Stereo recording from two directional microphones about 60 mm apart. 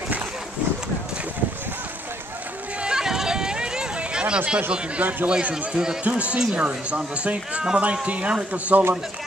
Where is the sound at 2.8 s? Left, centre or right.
Centre.